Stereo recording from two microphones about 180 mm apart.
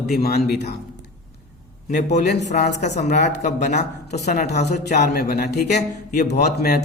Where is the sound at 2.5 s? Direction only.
50° left (ahead or behind).